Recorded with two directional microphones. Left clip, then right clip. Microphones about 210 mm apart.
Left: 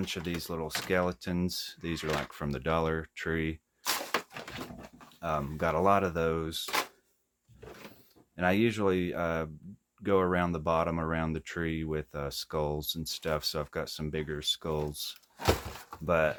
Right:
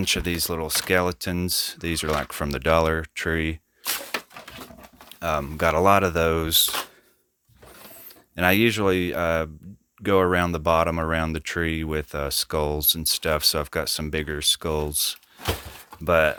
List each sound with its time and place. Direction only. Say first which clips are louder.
0.0 s speech: right 12 dB; 50° right (ahead or behind)
5.2 s speech: right 8 dB; 50° right (ahead or behind)
8.4 s speech: right 8 dB; 55° right (ahead or behind)